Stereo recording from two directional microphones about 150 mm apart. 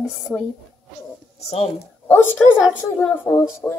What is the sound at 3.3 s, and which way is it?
Speech, 5° left (ahead or behind).